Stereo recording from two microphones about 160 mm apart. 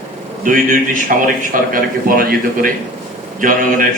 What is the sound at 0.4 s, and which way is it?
A man's voice, 55° right (ahead or behind).